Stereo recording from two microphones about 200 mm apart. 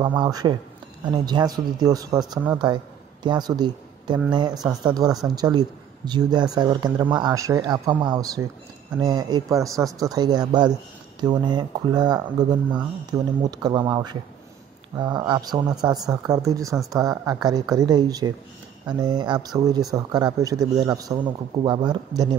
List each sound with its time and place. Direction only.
0.0 s a man's voice: 20° right (ahead or behind)